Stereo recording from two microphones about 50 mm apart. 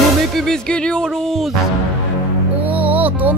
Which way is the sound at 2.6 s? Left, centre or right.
Right.